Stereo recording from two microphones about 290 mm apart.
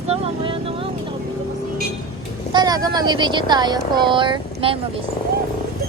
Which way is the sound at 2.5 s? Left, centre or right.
Centre.